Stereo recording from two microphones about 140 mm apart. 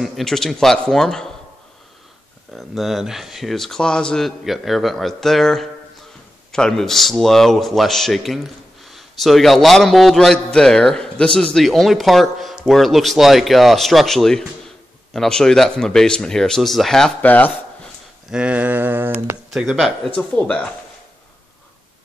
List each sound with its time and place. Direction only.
0.0 s a man's voice: centre (ahead or behind)
2.5 s a man's voice: centre (ahead or behind)
18.3 s a sound: 10° right (ahead or behind)
19.5 s a man's voice: centre (ahead or behind)